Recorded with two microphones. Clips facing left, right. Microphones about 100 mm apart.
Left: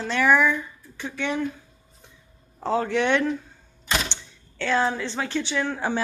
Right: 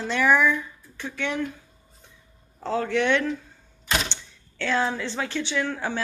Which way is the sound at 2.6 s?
15° left (ahead or behind).